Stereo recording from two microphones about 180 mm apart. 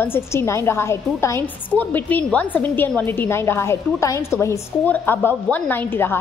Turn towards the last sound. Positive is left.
turn(degrees=10)  # may be behind; listen again after turning